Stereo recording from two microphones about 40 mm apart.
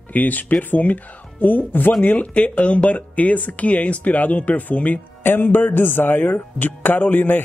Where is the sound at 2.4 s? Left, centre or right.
Left.